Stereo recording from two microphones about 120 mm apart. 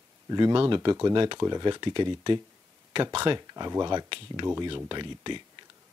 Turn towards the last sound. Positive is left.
turn(degrees=-40)  # may be behind; listen again after turning